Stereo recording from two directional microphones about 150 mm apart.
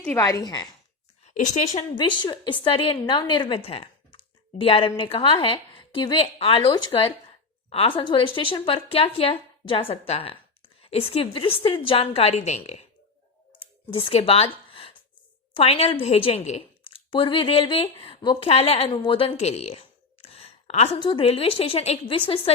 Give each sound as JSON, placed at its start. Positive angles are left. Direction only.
{"t": 0.0, "sound": "a woman's voice", "side_deg": 10}
{"t": 0.3, "sound": "a woman's voice", "side_deg": 25}
{"t": 1.2, "sound": "a woman's voice", "side_deg": 50}
{"t": 2.0, "sound": "a woman's voice", "side_deg": 30}
{"t": 13.9, "sound": "a woman's voice", "side_deg": 40}